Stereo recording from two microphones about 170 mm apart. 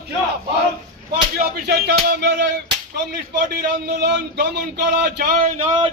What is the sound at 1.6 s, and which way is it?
Music, 75° right (ahead or behind).